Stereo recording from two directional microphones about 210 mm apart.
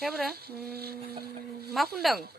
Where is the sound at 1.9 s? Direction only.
Centre (ahead or behind).